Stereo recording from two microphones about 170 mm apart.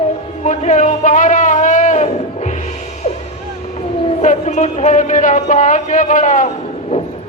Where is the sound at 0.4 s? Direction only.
45° left (ahead or behind).